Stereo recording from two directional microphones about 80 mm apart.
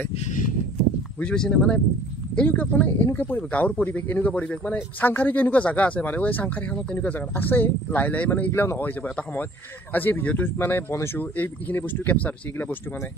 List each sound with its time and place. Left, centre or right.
1.2 s speech: centre; by 11.1 s left
11.1 s speech: left